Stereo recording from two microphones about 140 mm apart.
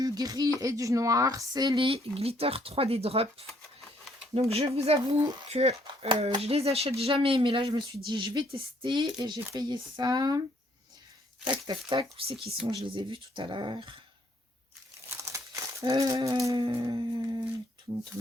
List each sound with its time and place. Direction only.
0.0 s speech: 25° right (ahead or behind)
11.6 s speech: 35° right (ahead or behind)
15.2 s crumpling: 20° right (ahead or behind)
16.6 s speech: 35° right (ahead or behind)